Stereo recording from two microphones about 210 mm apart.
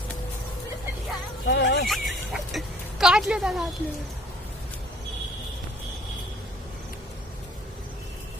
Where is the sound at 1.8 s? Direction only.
Centre (ahead or behind).